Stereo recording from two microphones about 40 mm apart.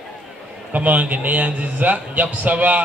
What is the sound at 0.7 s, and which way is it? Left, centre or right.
A man's voice, right.